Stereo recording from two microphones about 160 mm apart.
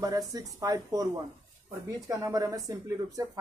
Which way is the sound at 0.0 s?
25° right (ahead or behind).